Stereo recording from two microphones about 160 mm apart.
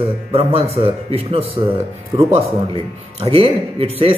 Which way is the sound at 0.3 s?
40° right (ahead or behind).